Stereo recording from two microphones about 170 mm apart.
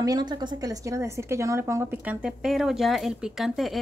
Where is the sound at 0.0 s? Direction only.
25° right (ahead or behind).